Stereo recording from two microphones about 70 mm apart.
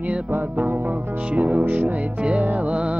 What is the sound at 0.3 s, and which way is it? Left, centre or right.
Music, right.